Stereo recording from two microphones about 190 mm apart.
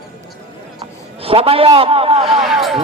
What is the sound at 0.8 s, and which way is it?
A man's voice, 30° right (ahead or behind).